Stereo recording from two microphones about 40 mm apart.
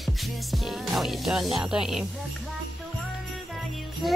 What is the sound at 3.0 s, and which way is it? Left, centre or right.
Jingle bell, centre.